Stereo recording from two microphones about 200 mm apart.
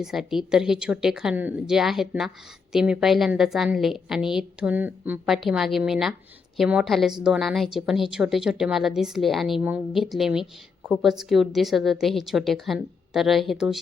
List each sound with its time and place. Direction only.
0.0 s a woman's voice: centre (ahead or behind)